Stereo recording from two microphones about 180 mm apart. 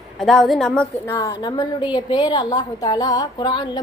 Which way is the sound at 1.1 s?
20° left (ahead or behind).